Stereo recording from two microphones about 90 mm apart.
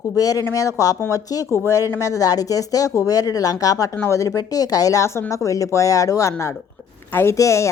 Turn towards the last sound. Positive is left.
turn(degrees=35)  # may be behind; listen again after turning